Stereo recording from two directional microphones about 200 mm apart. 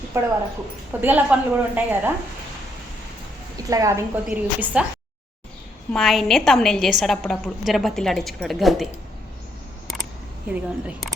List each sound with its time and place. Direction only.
0.1 s a woman's voice: 15° right (ahead or behind)
3.7 s a woman's voice: 15° right (ahead or behind)
4.3 s a woman's voice: 5° right (ahead or behind)
5.9 s a woman's voice: centre (ahead or behind)
10.5 s a woman's voice: 5° right (ahead or behind)